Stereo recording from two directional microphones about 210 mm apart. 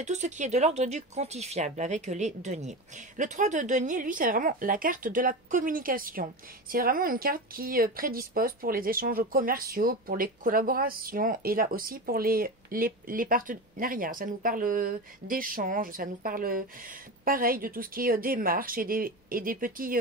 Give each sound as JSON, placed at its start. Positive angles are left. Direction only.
{"t": 0.0, "sound": "speech", "side_deg": -35}